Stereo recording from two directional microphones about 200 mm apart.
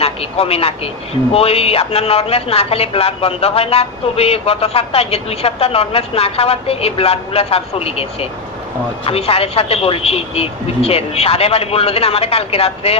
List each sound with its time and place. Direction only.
0.0 s speech: 30° left (ahead or behind)